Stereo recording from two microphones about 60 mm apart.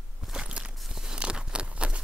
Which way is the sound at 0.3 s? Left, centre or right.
Centre.